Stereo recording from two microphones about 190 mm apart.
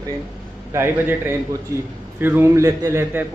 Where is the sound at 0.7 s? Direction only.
10° right (ahead or behind).